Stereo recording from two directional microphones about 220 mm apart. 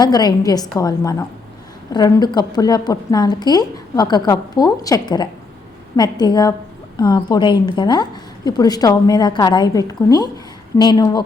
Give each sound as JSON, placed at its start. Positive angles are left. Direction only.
{"t": 0.0, "sound": "a woman's voice", "side_deg": 20}